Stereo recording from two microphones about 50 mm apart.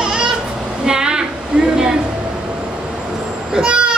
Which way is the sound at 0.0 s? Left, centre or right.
Centre.